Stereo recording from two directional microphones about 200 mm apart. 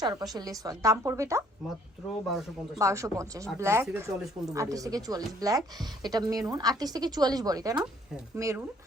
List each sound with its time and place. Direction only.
0.0 s speech: 20° right (ahead or behind)
2.7 s speech: 15° right (ahead or behind)